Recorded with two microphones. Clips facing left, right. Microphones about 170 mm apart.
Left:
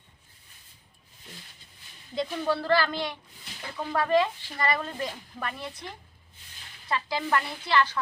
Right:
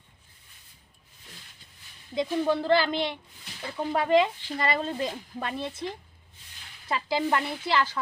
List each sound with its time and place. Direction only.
2.1 s speech: 15° right (ahead or behind)